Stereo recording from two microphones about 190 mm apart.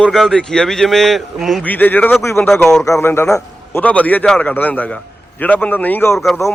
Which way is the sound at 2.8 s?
15° left (ahead or behind).